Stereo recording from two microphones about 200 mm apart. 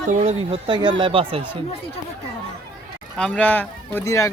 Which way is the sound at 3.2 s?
5° left (ahead or behind).